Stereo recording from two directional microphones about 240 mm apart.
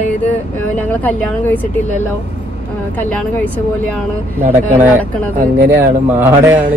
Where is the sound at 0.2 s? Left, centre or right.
Centre.